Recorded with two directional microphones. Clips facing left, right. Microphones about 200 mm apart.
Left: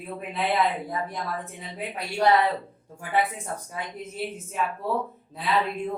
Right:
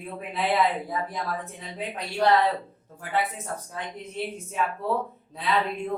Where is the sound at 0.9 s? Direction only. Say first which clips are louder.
Right 1 dB; centre (ahead or behind).